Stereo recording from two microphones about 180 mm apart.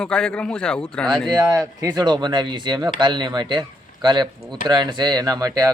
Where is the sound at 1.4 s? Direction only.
20° right (ahead or behind).